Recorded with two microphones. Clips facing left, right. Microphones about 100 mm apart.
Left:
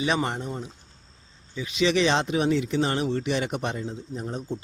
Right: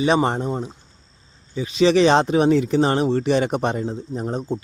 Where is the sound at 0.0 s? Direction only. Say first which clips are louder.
Right 7 dB; 35° right (ahead or behind).